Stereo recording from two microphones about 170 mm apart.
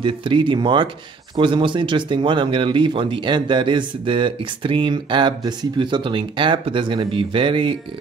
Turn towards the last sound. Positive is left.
turn(degrees=-30)  # may be behind; listen again after turning